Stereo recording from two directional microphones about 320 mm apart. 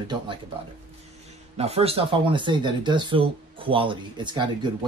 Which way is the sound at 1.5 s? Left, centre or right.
Centre.